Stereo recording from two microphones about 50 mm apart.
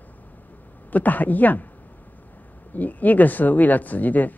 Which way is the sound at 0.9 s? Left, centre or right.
Left.